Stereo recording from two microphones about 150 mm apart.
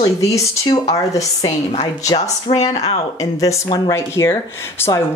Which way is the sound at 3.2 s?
25° left (ahead or behind).